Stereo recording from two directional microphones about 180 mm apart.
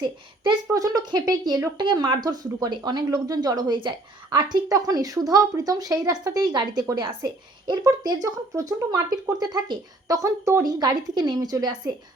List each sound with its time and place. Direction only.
0.0 s speech: 20° right (ahead or behind)